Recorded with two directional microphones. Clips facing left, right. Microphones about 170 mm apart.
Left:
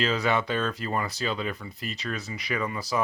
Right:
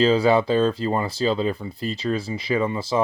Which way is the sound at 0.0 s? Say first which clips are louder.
Right 8 dB; 30° right (ahead or behind).